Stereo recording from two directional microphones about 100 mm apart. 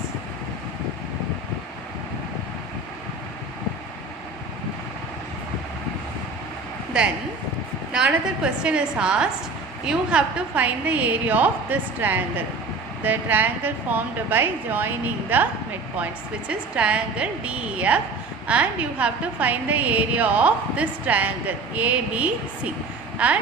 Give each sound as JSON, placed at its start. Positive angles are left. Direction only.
{"t": 7.9, "sound": "a woman's voice", "side_deg": -10}
{"t": 16.5, "sound": "a woman's voice", "side_deg": -10}